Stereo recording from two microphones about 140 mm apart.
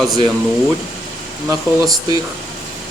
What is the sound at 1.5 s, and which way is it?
Speech, 25° right (ahead or behind).